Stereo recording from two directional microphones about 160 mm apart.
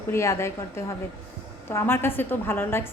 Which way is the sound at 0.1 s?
15° left (ahead or behind).